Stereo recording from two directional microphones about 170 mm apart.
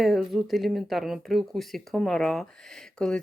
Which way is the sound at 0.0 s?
Centre (ahead or behind).